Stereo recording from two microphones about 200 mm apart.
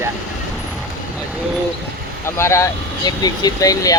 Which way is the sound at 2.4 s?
15° left (ahead or behind).